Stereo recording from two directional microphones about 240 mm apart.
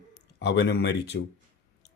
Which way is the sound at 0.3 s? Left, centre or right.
Left.